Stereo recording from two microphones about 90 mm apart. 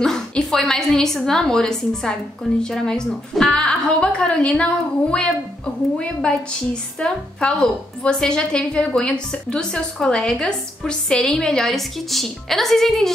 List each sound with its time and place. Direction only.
0.0 s a woman's voice: 5° left (ahead or behind)